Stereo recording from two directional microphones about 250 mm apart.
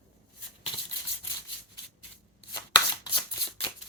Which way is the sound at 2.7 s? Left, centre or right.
Centre.